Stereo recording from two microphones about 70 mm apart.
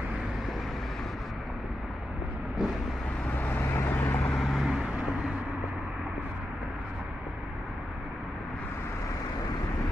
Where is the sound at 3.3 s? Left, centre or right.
Left.